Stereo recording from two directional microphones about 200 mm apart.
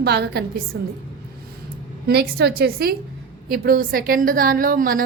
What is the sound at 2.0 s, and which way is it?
A woman's voice, 55° right (ahead or behind).